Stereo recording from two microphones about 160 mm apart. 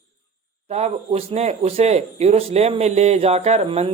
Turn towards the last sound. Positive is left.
turn(degrees=-40)  # may be behind; listen again after turning